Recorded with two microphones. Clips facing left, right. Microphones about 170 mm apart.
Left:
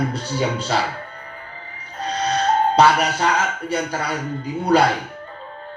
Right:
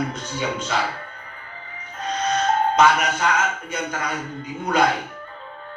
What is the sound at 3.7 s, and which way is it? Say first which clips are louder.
Speech: left 4 dB; 35° left (ahead or behind).